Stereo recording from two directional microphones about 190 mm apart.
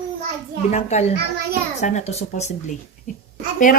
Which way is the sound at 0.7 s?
35° left (ahead or behind).